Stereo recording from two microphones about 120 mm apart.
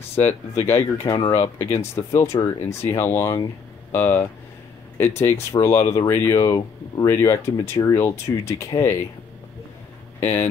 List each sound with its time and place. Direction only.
0.1 s speech: 20° left (ahead or behind)